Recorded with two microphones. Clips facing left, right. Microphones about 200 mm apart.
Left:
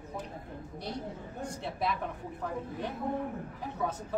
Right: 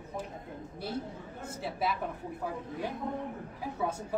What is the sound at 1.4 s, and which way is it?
A woman's voice, 5° right (ahead or behind).